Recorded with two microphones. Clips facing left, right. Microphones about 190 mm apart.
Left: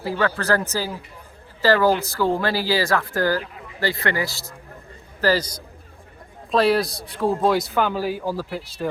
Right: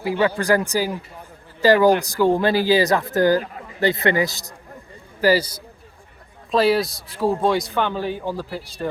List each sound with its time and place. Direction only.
0.0 s speech: 15° right (ahead or behind); by 8.9 s centre (ahead or behind)